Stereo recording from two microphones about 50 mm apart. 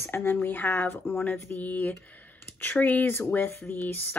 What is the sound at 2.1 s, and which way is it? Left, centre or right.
Clicking, left.